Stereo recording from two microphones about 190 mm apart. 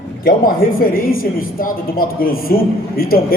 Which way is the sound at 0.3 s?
50° left (ahead or behind).